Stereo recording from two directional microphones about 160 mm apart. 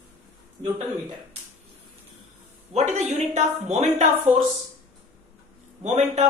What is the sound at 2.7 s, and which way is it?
Speech, 45° right (ahead or behind).